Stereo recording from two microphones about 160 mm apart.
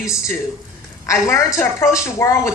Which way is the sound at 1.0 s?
15° left (ahead or behind).